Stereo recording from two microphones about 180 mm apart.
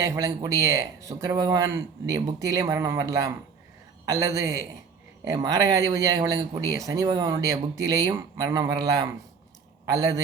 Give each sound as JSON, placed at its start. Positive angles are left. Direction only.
{"t": 0.0, "sound": "a man's voice", "side_deg": -15}